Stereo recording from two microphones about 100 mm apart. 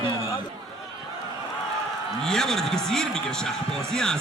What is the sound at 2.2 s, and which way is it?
Speech, 5° left (ahead or behind).